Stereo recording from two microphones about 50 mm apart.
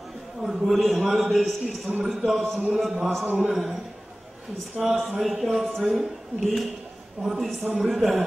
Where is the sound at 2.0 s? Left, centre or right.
Centre.